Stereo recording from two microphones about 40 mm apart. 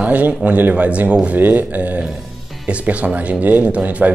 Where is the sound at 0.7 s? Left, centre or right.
Right.